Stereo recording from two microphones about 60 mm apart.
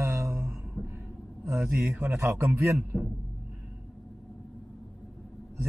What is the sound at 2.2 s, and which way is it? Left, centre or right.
Speech, right.